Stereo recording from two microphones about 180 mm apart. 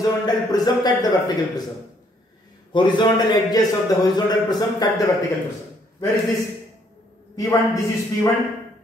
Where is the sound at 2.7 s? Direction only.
25° left (ahead or behind).